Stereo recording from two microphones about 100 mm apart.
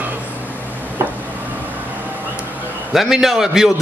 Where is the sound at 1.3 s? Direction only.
15° right (ahead or behind).